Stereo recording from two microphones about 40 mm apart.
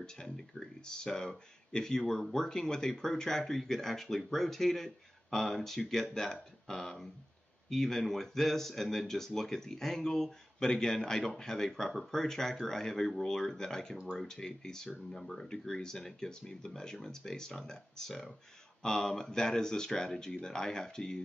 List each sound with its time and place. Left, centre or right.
0.0 s speech: centre